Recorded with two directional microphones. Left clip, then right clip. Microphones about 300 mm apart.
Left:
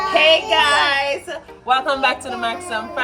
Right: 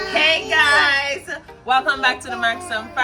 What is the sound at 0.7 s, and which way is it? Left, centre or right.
A woman's voice, centre.